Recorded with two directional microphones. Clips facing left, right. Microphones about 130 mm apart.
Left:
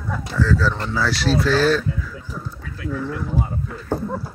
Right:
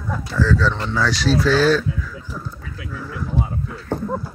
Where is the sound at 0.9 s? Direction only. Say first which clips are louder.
Right 1 dB; 5° left (ahead or behind).